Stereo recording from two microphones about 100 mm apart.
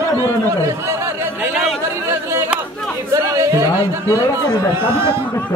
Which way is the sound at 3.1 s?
30° right (ahead or behind).